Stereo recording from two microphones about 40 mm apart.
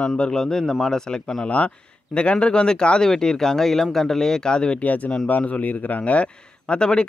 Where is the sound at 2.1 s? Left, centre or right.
Left.